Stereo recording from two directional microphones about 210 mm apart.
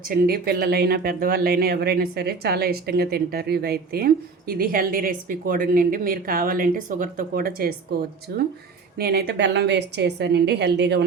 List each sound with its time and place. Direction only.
0.1 s speech: 45° right (ahead or behind)